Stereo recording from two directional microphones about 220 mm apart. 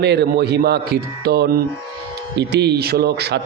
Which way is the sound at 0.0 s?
50° right (ahead or behind).